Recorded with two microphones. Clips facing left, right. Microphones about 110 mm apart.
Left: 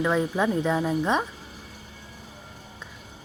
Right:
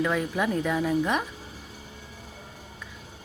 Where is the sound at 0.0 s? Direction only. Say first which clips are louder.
Left 2 dB; 20° left (ahead or behind).